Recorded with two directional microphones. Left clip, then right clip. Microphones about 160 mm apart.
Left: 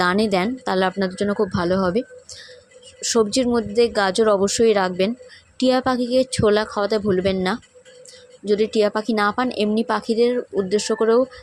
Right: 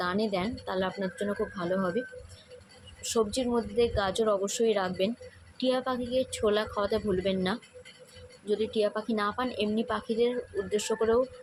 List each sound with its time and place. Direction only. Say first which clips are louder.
0.0 s speech: left 11 dB; 65° left (ahead or behind); by 11.2 s 45° left (ahead or behind)